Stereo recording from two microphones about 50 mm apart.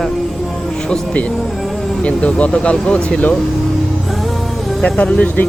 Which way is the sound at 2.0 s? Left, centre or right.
Left.